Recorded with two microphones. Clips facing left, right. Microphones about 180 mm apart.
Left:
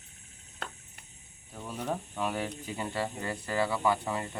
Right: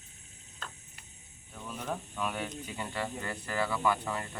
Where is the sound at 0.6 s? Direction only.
70° left (ahead or behind).